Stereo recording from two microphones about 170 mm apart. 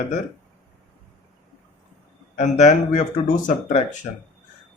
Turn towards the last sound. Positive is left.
turn(degrees=50)  # may be behind; listen again after turning